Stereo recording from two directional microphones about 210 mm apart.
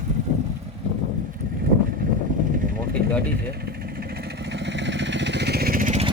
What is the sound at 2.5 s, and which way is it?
Vehicle, 40° right (ahead or behind).